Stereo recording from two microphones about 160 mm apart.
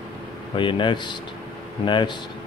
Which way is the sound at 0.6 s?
30° left (ahead or behind).